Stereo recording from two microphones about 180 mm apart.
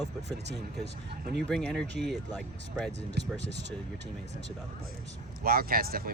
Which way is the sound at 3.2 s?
70° right (ahead or behind).